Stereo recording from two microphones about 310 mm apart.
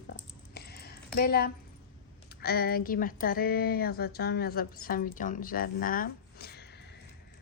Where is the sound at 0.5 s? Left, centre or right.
Left.